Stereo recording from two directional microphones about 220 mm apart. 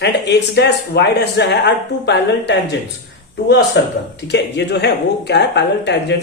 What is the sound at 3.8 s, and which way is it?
Speech, 55° left (ahead or behind).